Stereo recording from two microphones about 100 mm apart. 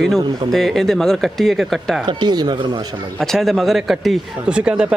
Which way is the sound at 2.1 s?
45° right (ahead or behind).